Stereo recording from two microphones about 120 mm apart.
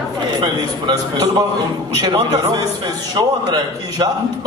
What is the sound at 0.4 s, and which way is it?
A man's voice, 35° right (ahead or behind).